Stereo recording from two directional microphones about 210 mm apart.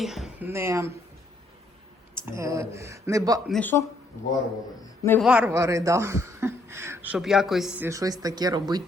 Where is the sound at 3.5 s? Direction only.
5° left (ahead or behind).